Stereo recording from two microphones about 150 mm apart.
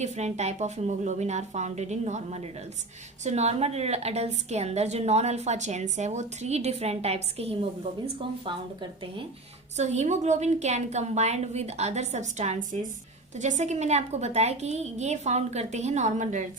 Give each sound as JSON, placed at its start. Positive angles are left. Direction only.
{"t": 0.0, "sound": "a woman's voice", "side_deg": -50}
{"t": 9.7, "sound": "a woman's voice", "side_deg": -50}